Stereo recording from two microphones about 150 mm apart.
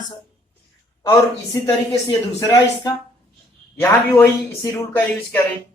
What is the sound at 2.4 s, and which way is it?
A man's voice, 25° left (ahead or behind).